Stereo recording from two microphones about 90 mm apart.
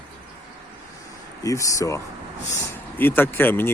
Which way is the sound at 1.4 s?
35° left (ahead or behind).